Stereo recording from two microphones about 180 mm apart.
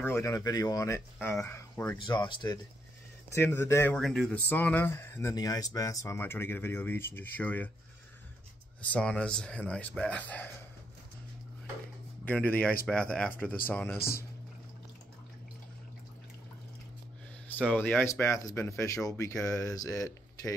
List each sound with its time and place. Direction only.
0.0 s speech: 15° left (ahead or behind)
2.0 s speech: 25° left (ahead or behind)
3.3 s speech: 15° left (ahead or behind)
8.8 s speech: 5° left (ahead or behind)
12.3 s speech: 10° left (ahead or behind)
17.6 s speech: 10° left (ahead or behind)